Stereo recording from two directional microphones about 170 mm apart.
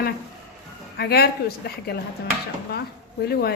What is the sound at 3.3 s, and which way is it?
Speech, 65° left (ahead or behind).